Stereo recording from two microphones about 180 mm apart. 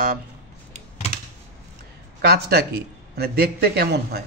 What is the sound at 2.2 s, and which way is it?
Speech, 60° right (ahead or behind).